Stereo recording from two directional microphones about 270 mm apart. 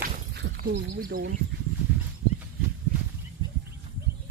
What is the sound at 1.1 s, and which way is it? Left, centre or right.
Speech, right.